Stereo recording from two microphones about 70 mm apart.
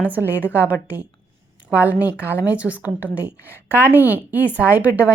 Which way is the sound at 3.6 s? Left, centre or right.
Right.